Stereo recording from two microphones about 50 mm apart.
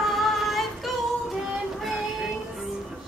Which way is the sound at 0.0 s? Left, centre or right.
Centre.